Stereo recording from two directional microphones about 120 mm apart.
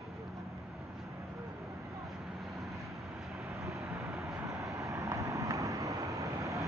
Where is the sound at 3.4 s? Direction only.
Centre (ahead or behind).